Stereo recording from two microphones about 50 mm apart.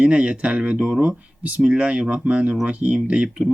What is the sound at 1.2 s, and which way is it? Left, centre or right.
Speech, right.